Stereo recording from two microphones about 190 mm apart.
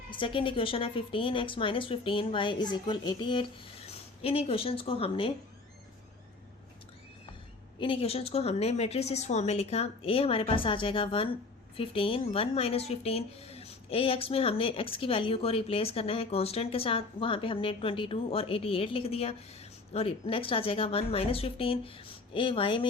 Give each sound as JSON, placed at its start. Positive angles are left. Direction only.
{"t": 0.1, "sound": "speech", "side_deg": 25}
{"t": 7.8, "sound": "a woman's voice", "side_deg": 30}